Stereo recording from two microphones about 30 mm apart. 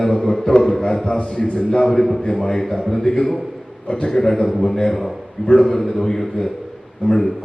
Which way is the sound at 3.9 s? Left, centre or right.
Left.